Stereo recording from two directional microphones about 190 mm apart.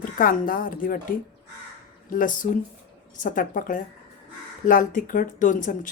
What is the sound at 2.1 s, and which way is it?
Speech, 45° left (ahead or behind).